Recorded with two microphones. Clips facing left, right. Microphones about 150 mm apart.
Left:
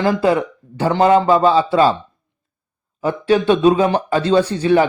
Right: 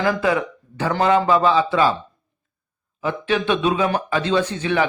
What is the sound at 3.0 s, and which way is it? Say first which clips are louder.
A man's voice: left 6 dB; 35° left (ahead or behind).